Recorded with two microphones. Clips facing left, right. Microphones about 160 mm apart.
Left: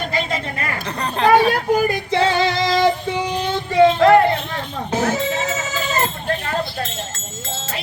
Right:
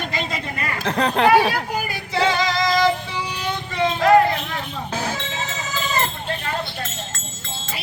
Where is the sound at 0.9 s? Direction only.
70° right (ahead or behind).